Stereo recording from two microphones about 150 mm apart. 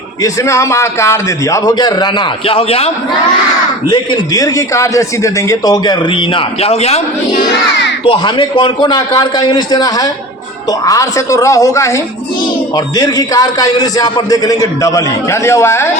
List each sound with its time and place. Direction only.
0.2 s a man's voice: 20° left (ahead or behind); by 2.9 s 40° left (ahead or behind)
3.8 s a man's voice: 30° left (ahead or behind)
8.0 s a man's voice: 35° left (ahead or behind); by 15.9 s 15° left (ahead or behind)